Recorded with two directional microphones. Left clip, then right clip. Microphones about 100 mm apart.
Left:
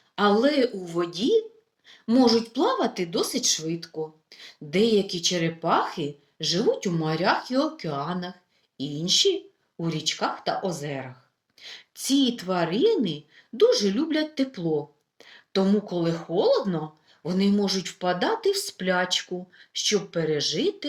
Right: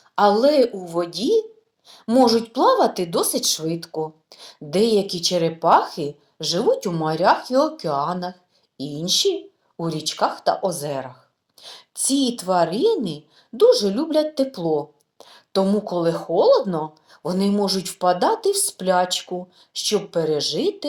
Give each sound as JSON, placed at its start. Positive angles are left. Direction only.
{"t": 0.2, "sound": "a woman's voice", "side_deg": -20}